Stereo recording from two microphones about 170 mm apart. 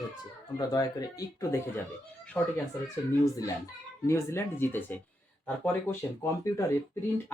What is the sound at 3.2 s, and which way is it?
Speech, 20° left (ahead or behind).